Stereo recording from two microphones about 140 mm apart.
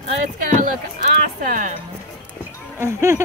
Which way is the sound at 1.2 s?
90° right.